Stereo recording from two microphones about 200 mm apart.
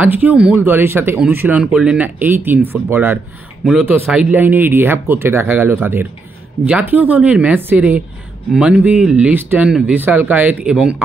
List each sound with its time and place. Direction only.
0.0 s speech: 10° right (ahead or behind)